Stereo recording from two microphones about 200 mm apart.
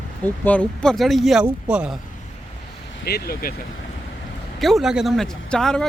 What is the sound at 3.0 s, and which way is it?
Speech, 50° left (ahead or behind).